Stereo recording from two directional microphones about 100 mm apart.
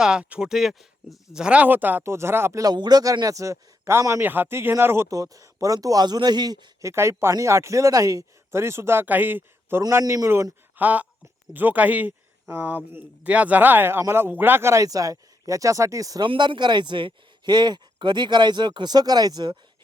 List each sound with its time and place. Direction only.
0.0 s speech: 10° right (ahead or behind); by 2.7 s 30° right (ahead or behind)
2.7 s a man's voice: 45° right (ahead or behind)
6.9 s speech: 25° right (ahead or behind)
10.0 s a man's voice: 40° right (ahead or behind)
10.2 s a man's voice: 25° right (ahead or behind)
16.2 s speech: 55° right (ahead or behind)